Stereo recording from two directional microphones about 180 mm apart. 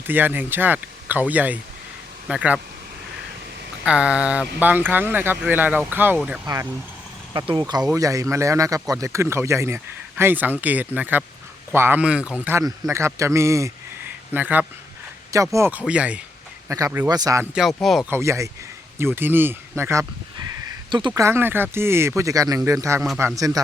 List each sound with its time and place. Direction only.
0.1 s speech: 10° right (ahead or behind)
3.8 s speech: 5° right (ahead or behind)
16.6 s speech: 15° right (ahead or behind)
17.5 s speech: centre (ahead or behind)
18.1 s speech: 15° right (ahead or behind)
20.7 s a sound: 25° right (ahead or behind)
21.1 s speech: 15° right (ahead or behind)
23.0 s speech: 5° right (ahead or behind)
23.2 s speech: 20° right (ahead or behind)